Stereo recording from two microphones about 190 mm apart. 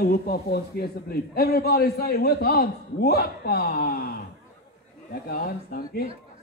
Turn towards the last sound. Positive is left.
turn(degrees=50)  # may be behind; listen again after turning